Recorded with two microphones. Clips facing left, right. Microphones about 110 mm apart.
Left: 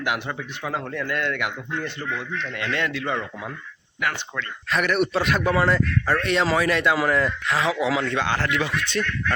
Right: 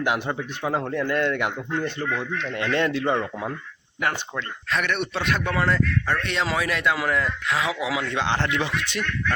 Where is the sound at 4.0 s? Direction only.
35° right (ahead or behind).